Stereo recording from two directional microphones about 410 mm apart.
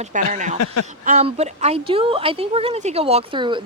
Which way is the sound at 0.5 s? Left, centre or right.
Left.